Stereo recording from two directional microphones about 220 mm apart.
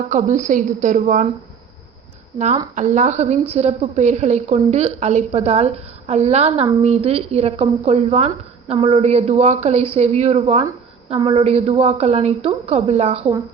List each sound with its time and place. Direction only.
0.1 s a woman's voice: 35° right (ahead or behind)
2.7 s a woman's voice: 35° right (ahead or behind)